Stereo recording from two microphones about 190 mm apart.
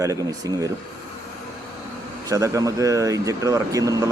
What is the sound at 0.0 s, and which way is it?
Speech, 15° right (ahead or behind).